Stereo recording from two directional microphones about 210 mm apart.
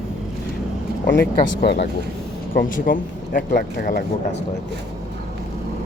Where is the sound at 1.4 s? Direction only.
55° left (ahead or behind).